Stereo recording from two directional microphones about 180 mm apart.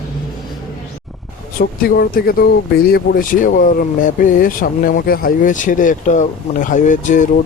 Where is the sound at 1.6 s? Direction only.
55° left (ahead or behind).